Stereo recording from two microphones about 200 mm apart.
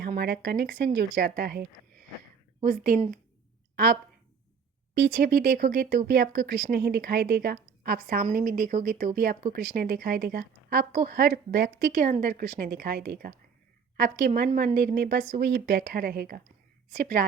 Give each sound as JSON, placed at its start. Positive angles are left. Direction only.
{"t": 0.0, "sound": "speech", "side_deg": -50}
{"t": 2.6, "sound": "speech", "side_deg": -45}
{"t": 5.1, "sound": "speech", "side_deg": -50}